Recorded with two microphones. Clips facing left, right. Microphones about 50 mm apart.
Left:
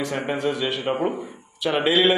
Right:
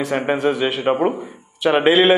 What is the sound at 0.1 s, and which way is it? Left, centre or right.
Speech, right.